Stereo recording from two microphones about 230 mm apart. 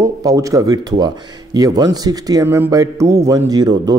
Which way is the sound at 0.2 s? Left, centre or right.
Centre.